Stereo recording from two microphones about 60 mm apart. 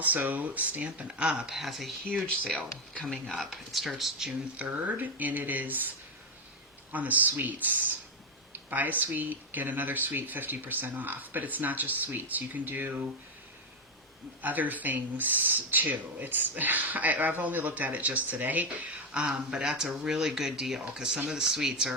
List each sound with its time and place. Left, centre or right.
0.0 s speech: right; by 4.3 s centre
4.5 s speech: right
6.9 s speech: right
14.4 s speech: right
19.1 s speech: centre